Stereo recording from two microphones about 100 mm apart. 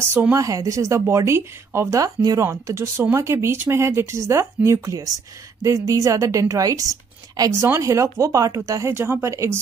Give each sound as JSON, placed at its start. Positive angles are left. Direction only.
{"t": 0.3, "sound": "a woman's voice", "side_deg": -35}